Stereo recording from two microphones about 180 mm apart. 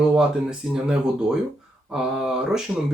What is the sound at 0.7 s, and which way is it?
Speech, 5° right (ahead or behind).